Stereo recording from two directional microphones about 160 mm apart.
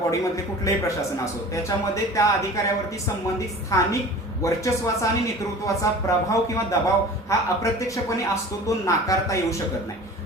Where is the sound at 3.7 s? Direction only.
20° left (ahead or behind).